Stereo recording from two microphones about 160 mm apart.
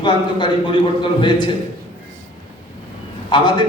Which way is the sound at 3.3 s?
30° left (ahead or behind).